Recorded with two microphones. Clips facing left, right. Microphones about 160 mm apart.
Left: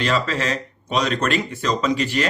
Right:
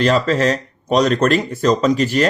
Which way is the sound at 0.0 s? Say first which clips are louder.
Right 7 dB; 40° right (ahead or behind).